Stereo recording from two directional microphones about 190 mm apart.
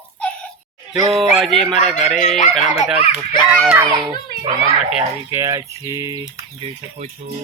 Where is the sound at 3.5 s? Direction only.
Centre (ahead or behind).